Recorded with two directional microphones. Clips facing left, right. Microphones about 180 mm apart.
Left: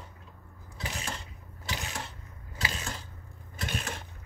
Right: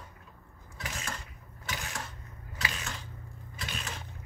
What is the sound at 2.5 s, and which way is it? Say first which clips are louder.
Mechanisms: left 2 dB; 30° left (ahead or behind).